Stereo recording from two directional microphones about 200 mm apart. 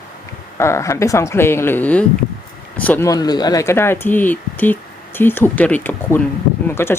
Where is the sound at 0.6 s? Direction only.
15° left (ahead or behind).